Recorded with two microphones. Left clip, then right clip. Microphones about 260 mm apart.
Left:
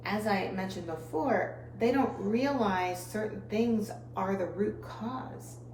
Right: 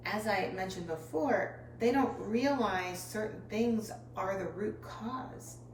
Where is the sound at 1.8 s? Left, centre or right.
Centre.